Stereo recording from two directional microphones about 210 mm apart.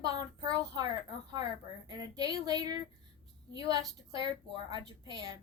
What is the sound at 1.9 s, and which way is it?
A woman's voice, 20° right (ahead or behind).